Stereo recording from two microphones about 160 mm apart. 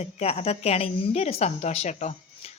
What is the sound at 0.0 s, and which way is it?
A woman's voice, 40° left (ahead or behind).